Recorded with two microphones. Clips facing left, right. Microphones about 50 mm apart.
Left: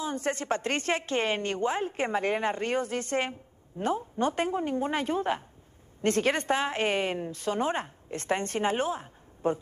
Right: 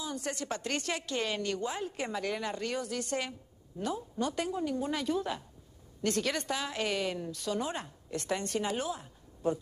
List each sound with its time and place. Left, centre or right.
0.0 s a woman's voice: left